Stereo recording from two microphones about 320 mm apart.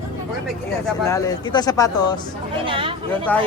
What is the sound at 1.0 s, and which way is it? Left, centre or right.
Speech, centre.